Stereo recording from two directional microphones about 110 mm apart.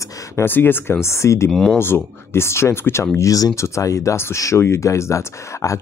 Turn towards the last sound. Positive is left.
turn(degrees=25)  # may be behind; listen again after turning